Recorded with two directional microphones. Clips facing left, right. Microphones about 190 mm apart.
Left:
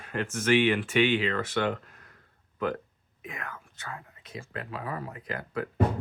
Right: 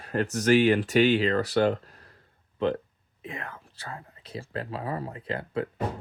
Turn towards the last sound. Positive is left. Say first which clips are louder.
# right 3 dB
turn(degrees=-30)  # may be behind; listen again after turning